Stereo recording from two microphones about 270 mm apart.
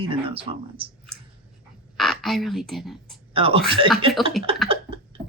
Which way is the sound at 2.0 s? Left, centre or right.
Centre.